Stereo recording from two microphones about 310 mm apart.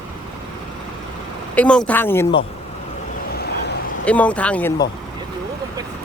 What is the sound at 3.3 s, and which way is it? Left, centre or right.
Vehicle, left.